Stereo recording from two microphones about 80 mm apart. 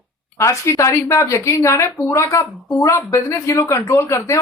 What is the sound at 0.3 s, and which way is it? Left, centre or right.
Speech, left.